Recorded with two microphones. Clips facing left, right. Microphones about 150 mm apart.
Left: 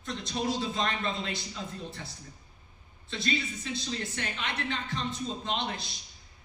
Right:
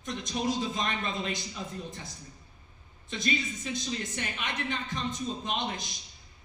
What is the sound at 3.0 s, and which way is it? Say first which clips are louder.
A woman's voice: right 1 dB; 15° right (ahead or behind).